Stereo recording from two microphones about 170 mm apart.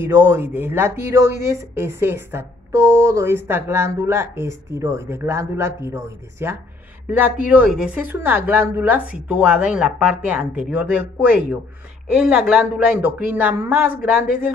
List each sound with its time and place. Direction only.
0.0 s speech: 15° right (ahead or behind)